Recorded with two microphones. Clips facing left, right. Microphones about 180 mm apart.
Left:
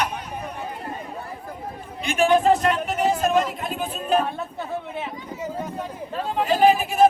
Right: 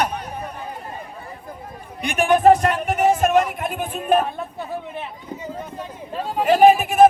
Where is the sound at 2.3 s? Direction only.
55° right (ahead or behind).